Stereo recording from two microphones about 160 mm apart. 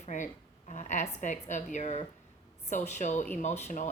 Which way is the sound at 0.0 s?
50° left (ahead or behind).